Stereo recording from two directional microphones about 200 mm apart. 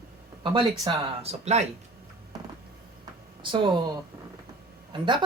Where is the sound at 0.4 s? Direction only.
25° right (ahead or behind).